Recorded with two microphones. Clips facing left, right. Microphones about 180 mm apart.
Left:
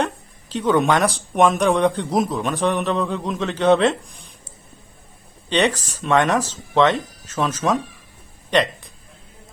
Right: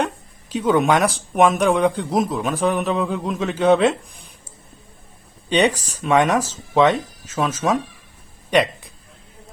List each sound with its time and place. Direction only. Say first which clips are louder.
0.0 s speech: even; 10° right (ahead or behind)
5.5 s speech: right 2 dB; 10° right (ahead or behind)